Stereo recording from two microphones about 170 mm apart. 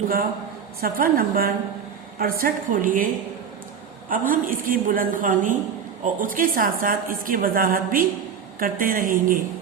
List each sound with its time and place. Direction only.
0.8 s a woman's voice: 60° right (ahead or behind)
4.1 s a woman's voice: 55° right (ahead or behind)